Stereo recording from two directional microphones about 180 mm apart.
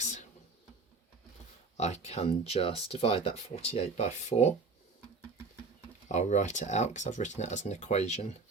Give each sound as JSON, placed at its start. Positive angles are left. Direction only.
{"t": 0.0, "sound": "a sound", "side_deg": 40}
{"t": 1.7, "sound": "speech", "side_deg": 40}
{"t": 6.1, "sound": "speech", "side_deg": 40}